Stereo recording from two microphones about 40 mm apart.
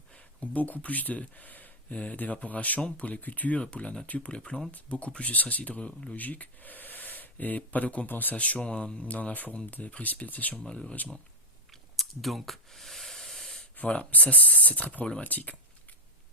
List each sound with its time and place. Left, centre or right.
0.1 s speech: left
1.9 s speech: left
3.6 s speech: left
8.0 s speech: left
8.4 s speech: left
10.6 s speech: left
11.7 s a sound: centre
13.8 s speech: left